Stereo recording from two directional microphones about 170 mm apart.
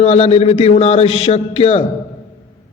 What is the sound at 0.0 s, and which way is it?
Mantra, 40° left (ahead or behind).